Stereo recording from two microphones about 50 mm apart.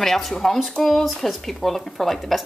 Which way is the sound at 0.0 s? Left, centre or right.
Centre.